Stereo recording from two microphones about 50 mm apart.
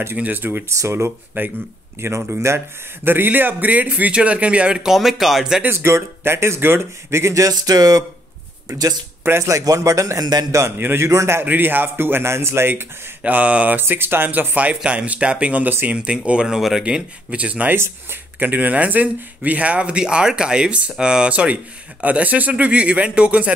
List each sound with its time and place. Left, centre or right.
0.2 s a man's voice: right
0.7 s speech: right
1.4 s a man's voice: right
2.2 s speech: right; by 4.9 s centre
4.9 s speech: centre
5.7 s a man's voice: right
9.5 s a man's voice: right
10.8 s a man's voice: right
11.1 s a man's voice: right
11.4 s a man's voice: right
13.2 s speech: right
13.7 s a man's voice: right